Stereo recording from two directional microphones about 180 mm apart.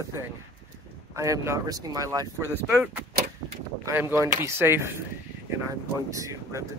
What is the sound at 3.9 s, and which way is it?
Speech, 10° right (ahead or behind).